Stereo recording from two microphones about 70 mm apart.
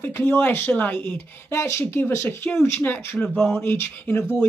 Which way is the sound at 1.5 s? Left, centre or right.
Left.